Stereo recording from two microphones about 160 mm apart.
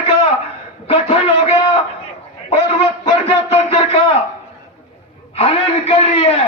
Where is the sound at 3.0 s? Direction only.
40° left (ahead or behind).